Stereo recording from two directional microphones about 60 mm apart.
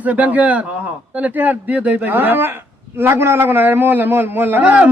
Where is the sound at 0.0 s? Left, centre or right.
Right.